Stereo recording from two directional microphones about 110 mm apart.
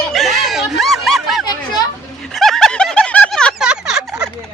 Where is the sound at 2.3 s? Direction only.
5° left (ahead or behind).